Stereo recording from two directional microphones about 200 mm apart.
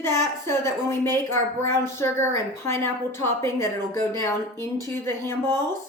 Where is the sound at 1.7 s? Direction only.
10° left (ahead or behind).